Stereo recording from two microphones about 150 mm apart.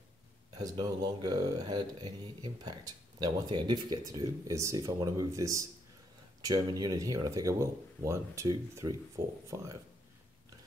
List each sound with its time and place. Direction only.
0.6 s speech: 30° right (ahead or behind)